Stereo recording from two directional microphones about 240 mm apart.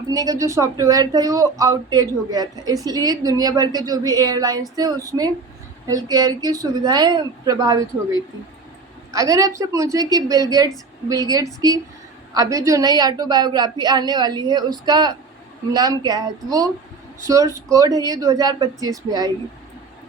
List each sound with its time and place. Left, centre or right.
0.1 s speech: centre
9.1 s speech: centre